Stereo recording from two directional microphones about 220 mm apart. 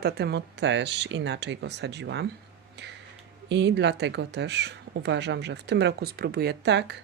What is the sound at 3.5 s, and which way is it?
Speech, 50° right (ahead or behind).